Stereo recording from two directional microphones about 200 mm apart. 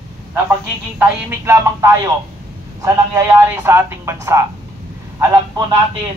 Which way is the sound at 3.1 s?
10° right (ahead or behind).